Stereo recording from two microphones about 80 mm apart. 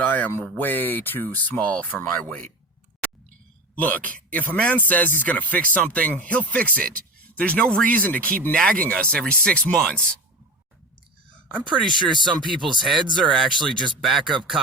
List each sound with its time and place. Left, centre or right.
0.0 s a sound: left
0.4 s speech: left
3.8 s speech: centre
11.4 s speech: centre
11.9 s speech: right
13.1 s speech: centre